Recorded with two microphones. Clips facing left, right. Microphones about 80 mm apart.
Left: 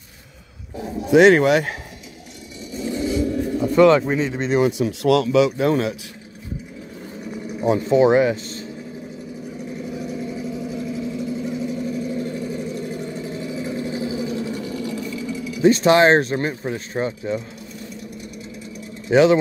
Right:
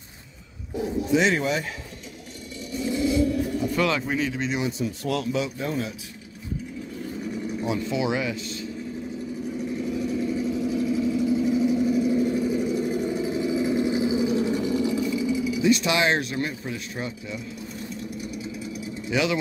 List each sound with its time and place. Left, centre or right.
1.0 s speech: left
2.8 s pigeon: left
4.6 s speech: left
7.6 s speech: left
10.2 s vehicle: centre
15.6 s speech: left
19.0 s speech: left